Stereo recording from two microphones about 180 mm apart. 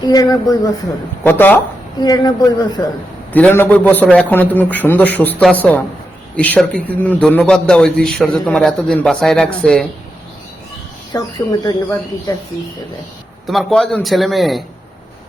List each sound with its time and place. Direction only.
0.0 s speech: 20° left (ahead or behind)
1.2 s a man's voice: 10° left (ahead or behind)
2.0 s speech: 20° left (ahead or behind)
3.3 s a man's voice: 10° left (ahead or behind)
11.1 s speech: 20° left (ahead or behind)
13.5 s a man's voice: centre (ahead or behind)